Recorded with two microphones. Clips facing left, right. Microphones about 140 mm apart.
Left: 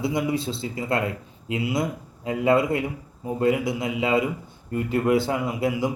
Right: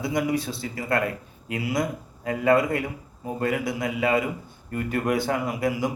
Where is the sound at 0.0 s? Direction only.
25° left (ahead or behind).